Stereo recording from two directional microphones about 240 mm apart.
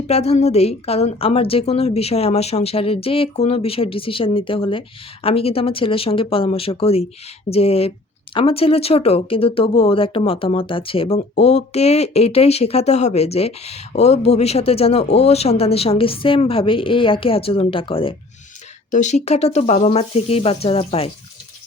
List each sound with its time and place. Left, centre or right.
0.1 s speech: left